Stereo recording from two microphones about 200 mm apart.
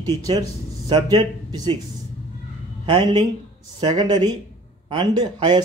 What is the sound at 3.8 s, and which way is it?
Speech, 20° right (ahead or behind).